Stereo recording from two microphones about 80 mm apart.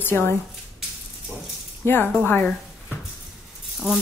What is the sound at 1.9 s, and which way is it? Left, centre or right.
Speech, left.